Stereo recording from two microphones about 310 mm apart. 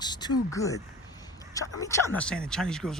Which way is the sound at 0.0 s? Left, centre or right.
Centre.